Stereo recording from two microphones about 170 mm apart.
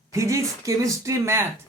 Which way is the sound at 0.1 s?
20° right (ahead or behind).